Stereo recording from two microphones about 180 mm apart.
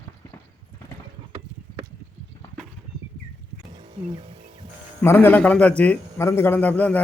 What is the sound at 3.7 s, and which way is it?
Music, 25° right (ahead or behind).